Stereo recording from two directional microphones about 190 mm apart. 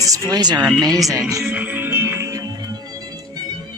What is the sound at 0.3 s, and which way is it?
Speech, 20° right (ahead or behind).